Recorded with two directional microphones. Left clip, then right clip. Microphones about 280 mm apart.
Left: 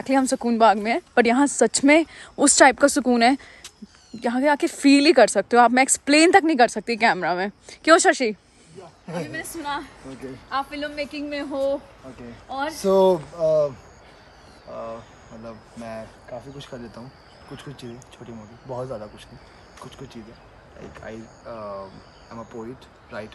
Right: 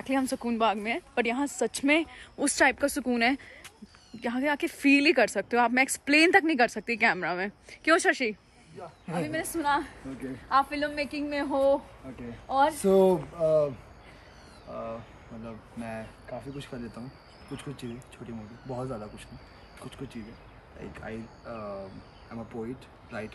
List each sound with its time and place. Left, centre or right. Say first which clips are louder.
0.0 s speech: left 8 dB; centre
9.2 s a man's voice: right 3 dB; centre
12.8 s speech: left 5 dB; centre
14.7 s speech: left 4 dB; centre
18.7 s speech: left 5 dB; centre
20.9 s speech: left 3 dB; centre